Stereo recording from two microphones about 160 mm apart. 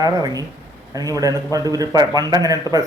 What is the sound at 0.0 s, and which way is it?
A man's voice, 20° right (ahead or behind).